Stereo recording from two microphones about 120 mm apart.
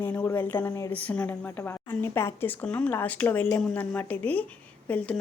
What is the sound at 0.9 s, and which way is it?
A woman's voice, 10° left (ahead or behind).